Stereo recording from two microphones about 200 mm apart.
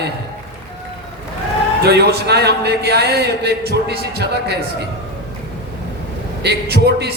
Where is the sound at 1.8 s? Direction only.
55° right (ahead or behind).